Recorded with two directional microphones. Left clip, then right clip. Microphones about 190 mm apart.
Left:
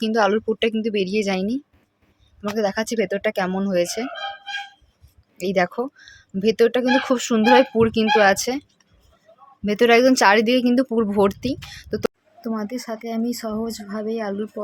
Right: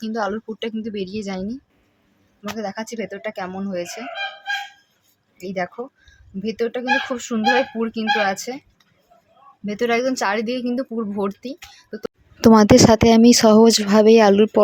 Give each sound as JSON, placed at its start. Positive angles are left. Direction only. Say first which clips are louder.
{"t": 0.0, "sound": "speech", "louder": "left 6 dB", "side_deg": 40}
{"t": 5.4, "sound": "speech", "louder": "left 6 dB", "side_deg": 50}
{"t": 9.6, "sound": "speech", "louder": "left 5 dB", "side_deg": 35}
{"t": 12.4, "sound": "speech", "louder": "right 18 dB", "side_deg": -45}